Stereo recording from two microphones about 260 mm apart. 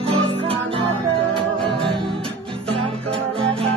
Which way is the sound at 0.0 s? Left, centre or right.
Right.